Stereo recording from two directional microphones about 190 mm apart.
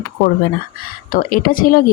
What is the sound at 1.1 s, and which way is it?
Speech, 50° left (ahead or behind).